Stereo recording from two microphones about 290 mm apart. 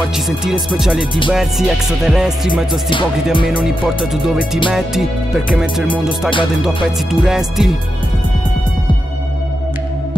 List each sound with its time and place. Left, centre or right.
0.4 s speech: centre